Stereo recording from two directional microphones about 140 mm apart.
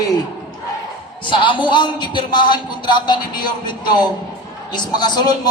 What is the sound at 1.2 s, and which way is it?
A man's voice, 35° left (ahead or behind).